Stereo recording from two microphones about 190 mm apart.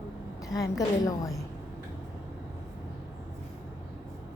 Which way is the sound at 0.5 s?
20° left (ahead or behind).